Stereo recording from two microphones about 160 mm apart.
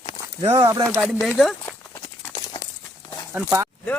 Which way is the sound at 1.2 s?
Centre (ahead or behind).